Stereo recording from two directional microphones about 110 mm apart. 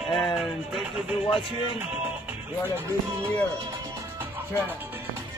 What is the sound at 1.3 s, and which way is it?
Speech, 50° left (ahead or behind).